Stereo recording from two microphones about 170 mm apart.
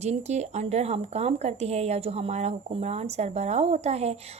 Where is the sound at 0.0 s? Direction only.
40° right (ahead or behind).